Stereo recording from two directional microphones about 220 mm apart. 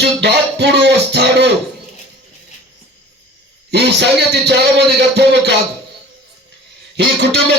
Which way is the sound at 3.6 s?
50° right (ahead or behind).